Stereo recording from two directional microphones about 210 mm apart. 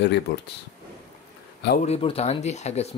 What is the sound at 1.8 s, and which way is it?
Speech, 30° left (ahead or behind).